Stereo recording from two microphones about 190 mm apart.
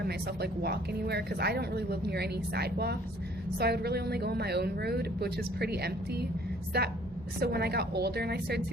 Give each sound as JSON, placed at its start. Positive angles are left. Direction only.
{"t": 0.0, "sound": "speech", "side_deg": -60}